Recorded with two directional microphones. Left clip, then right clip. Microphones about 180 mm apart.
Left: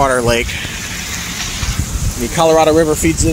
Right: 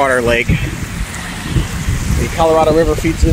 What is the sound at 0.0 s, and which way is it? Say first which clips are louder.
Speech: right 1 dB; 5° left (ahead or behind).